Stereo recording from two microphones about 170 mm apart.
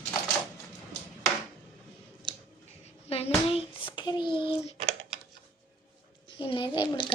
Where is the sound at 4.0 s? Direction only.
25° left (ahead or behind).